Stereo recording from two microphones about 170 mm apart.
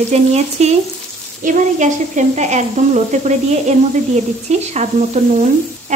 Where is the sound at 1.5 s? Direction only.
45° right (ahead or behind).